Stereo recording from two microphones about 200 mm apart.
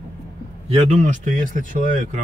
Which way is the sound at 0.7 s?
30° right (ahead or behind).